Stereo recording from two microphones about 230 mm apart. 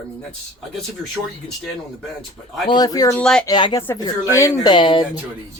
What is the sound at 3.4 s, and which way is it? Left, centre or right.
Speech, centre.